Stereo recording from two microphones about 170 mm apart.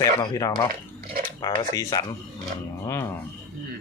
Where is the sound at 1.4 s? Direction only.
20° left (ahead or behind).